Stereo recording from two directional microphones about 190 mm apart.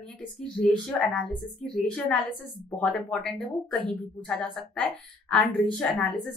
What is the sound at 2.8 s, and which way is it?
A woman's voice, 5° left (ahead or behind).